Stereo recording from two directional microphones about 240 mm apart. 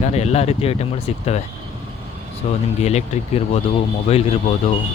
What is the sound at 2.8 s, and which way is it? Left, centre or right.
Speech, left.